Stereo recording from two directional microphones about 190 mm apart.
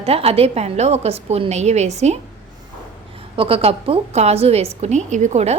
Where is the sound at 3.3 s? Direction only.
30° right (ahead or behind).